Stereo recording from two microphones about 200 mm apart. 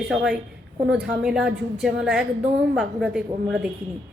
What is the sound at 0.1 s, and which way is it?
A woman's voice, centre (ahead or behind).